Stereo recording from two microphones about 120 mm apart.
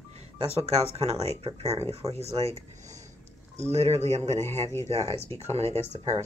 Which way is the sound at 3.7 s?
65° right (ahead or behind).